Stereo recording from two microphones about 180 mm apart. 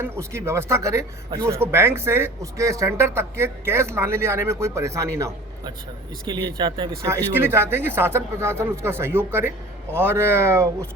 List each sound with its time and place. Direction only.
0.0 s speech: 15° right (ahead or behind)
7.3 s speech: 15° right (ahead or behind)